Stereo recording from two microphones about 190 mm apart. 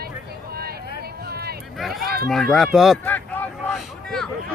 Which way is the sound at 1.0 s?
55° right (ahead or behind).